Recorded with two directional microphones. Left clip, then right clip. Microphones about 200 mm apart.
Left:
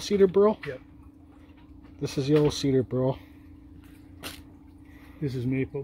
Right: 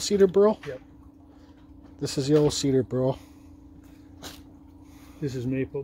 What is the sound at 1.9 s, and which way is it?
Speech, centre (ahead or behind).